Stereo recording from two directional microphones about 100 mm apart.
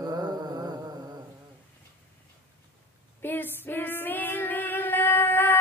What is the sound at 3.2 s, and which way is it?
Female singing, 20° left (ahead or behind).